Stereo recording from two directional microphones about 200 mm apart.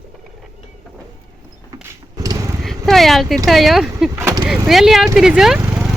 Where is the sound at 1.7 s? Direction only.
20° right (ahead or behind).